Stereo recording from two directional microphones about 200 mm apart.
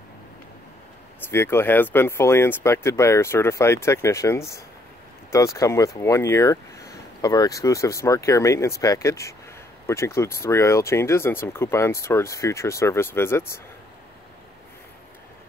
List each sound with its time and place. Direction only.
1.3 s speech: 10° left (ahead or behind)